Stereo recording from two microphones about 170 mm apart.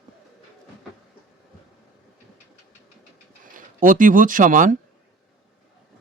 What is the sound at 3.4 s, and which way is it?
Speech, 50° right (ahead or behind).